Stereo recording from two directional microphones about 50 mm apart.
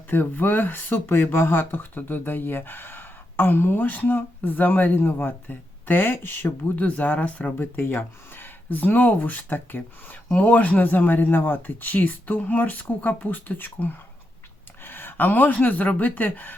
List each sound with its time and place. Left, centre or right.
0.1 s speech: left
7.6 s speech: left